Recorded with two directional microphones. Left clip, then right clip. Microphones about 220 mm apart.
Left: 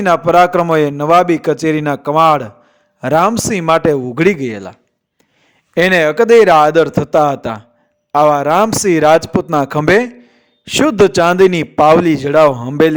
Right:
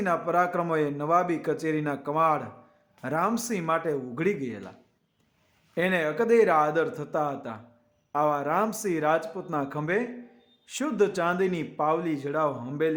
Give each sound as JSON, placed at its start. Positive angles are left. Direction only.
{"t": 0.0, "sound": "a man's voice", "side_deg": 45}
{"t": 5.7, "sound": "a man's voice", "side_deg": 45}